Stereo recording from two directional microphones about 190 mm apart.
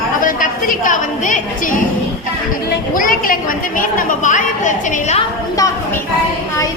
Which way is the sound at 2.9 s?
50° left (ahead or behind).